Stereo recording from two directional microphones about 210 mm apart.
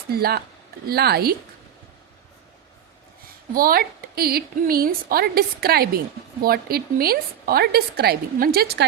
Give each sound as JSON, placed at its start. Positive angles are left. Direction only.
{"t": 0.1, "sound": "a woman's voice", "side_deg": -45}
{"t": 3.5, "sound": "a woman's voice", "side_deg": -45}